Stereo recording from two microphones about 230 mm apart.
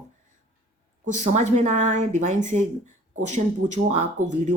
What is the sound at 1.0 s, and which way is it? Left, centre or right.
Speech, right.